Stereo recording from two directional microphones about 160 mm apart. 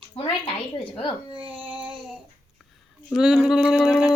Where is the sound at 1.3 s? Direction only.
35° right (ahead or behind).